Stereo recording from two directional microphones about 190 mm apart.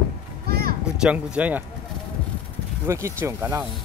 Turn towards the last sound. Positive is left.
turn(degrees=-10)  # may be behind; listen again after turning